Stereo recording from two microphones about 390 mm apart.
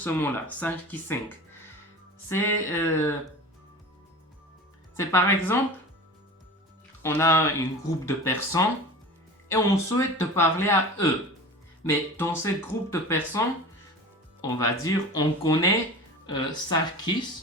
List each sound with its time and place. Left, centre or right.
0.0 s speech: centre
2.3 s speech: centre
4.9 s speech: centre
7.0 s speech: centre
14.4 s speech: centre